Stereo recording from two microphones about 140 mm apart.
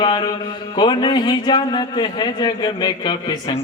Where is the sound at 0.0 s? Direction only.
35° left (ahead or behind).